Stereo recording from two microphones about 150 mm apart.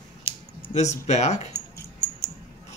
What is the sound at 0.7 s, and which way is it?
Speech, 50° left (ahead or behind).